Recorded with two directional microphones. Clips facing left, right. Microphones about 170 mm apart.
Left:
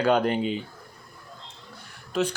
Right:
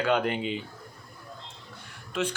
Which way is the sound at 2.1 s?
40° left (ahead or behind).